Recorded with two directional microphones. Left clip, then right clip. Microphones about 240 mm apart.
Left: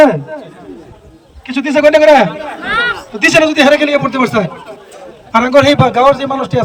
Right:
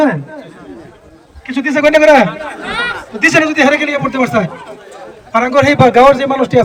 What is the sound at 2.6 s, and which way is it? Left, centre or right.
Chatter, centre.